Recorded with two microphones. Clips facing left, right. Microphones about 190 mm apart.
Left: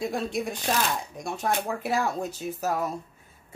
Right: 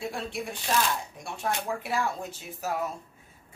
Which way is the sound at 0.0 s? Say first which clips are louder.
Left 5 dB; 40° left (ahead or behind).